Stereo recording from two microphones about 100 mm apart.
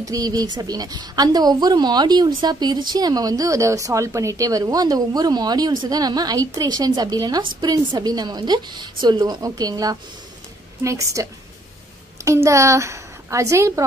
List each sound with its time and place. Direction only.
0.0 s a woman's voice: 35° right (ahead or behind)
12.3 s a woman's voice: 30° right (ahead or behind)